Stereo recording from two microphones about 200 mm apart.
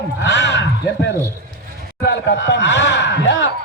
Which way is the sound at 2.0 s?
60° left (ahead or behind).